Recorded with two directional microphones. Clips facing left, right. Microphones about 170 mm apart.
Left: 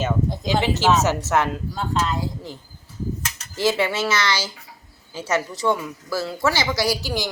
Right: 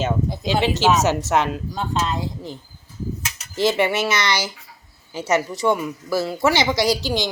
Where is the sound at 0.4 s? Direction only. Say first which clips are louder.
Right 2 dB; 20° right (ahead or behind).